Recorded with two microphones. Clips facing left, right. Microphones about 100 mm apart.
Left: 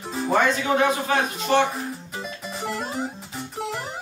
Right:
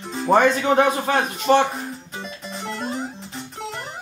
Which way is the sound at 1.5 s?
35° right (ahead or behind).